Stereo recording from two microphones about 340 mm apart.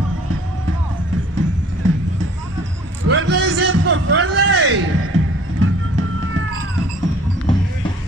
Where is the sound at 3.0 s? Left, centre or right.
Right.